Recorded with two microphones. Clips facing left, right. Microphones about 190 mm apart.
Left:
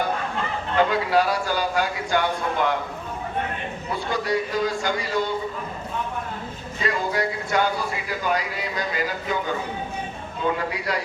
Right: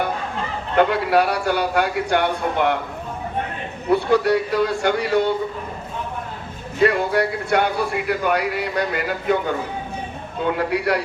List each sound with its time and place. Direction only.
0.8 s speech: 65° right (ahead or behind)
3.8 s speech: 65° right (ahead or behind)
6.7 s speech: 60° right (ahead or behind)